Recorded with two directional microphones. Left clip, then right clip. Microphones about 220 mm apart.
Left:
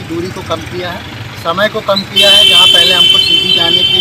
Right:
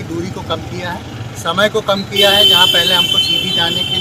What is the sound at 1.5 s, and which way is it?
Speech, 20° right (ahead or behind).